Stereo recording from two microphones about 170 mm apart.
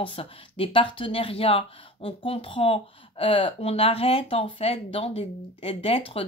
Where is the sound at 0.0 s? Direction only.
30° left (ahead or behind).